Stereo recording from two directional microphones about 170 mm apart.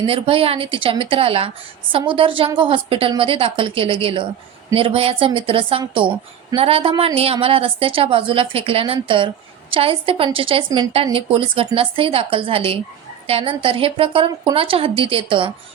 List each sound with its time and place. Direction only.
0.1 s a woman's voice: 35° right (ahead or behind)